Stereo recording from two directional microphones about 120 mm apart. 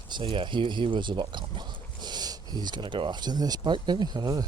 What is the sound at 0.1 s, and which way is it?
Speech, 45° right (ahead or behind).